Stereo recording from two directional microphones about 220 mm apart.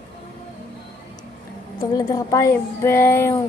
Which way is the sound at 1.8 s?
15° left (ahead or behind).